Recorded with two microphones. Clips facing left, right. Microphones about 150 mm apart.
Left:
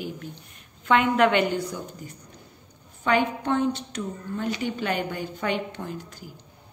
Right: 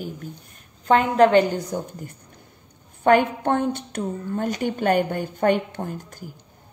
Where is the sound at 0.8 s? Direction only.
40° right (ahead or behind).